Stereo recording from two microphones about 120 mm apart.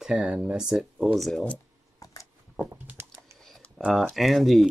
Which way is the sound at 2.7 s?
20° right (ahead or behind).